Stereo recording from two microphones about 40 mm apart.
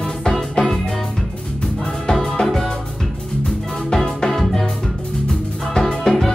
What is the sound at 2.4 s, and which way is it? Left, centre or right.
Music, centre.